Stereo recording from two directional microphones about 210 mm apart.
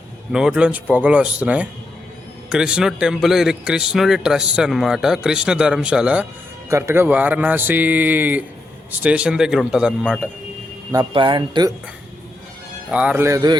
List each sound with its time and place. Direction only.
0.3 s a man's voice: 5° right (ahead or behind)
10.9 s speech: 25° right (ahead or behind)
12.9 s a man's voice: 5° right (ahead or behind)